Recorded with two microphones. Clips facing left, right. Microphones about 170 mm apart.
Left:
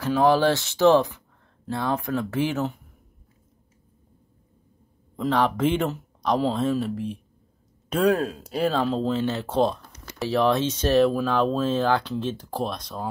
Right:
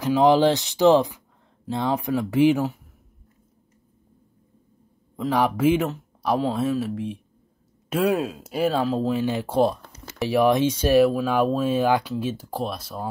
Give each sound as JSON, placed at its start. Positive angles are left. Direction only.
{"t": 0.0, "sound": "speech", "side_deg": -15}
{"t": 5.1, "sound": "speech", "side_deg": -10}